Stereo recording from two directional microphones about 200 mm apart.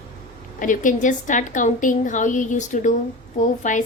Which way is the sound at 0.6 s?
40° left (ahead or behind).